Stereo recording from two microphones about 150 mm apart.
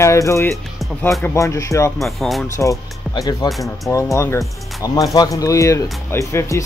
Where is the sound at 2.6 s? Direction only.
20° left (ahead or behind).